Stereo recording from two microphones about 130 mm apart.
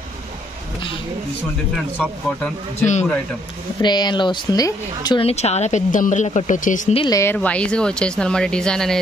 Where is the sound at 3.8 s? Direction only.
35° left (ahead or behind).